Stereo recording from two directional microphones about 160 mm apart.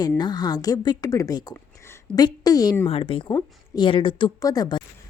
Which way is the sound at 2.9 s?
35° left (ahead or behind).